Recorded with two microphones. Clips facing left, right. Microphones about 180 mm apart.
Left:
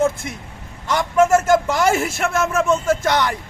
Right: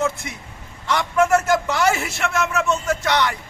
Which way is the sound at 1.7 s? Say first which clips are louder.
Left 2 dB; 45° left (ahead or behind).